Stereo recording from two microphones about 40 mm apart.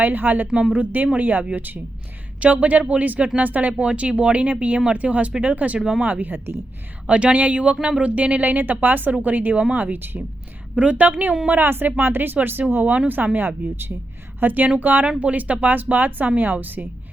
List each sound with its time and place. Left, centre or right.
0.0 s speech: right
0.4 s a woman's voice: centre
0.7 s speech: right
2.4 s speech: right
6.3 s a woman's voice: right
7.1 s speech: right
10.8 s speech: right
11.0 s speech: right
11.6 s speech: right
15.2 s speech: right